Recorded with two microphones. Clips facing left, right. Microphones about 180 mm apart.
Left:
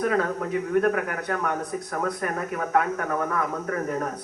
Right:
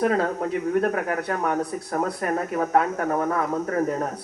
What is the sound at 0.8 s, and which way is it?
Speech, 35° right (ahead or behind).